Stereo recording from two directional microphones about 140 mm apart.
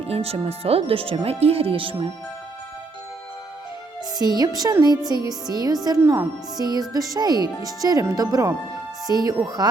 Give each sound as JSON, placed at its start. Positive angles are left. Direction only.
{"t": 0.1, "sound": "speech", "side_deg": -45}
{"t": 4.2, "sound": "speech", "side_deg": -30}